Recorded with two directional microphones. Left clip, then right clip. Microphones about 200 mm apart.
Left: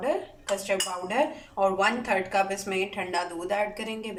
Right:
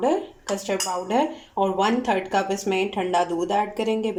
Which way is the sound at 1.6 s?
25° right (ahead or behind).